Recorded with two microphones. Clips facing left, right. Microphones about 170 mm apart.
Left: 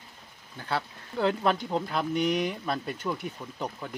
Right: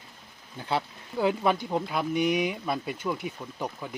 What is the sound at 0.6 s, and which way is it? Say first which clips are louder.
Speech: right 2 dB; 15° right (ahead or behind).